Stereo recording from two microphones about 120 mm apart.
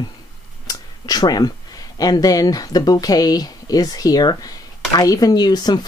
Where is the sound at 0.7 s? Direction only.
35° left (ahead or behind).